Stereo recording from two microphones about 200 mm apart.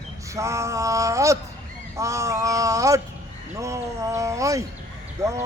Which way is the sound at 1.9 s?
15° right (ahead or behind).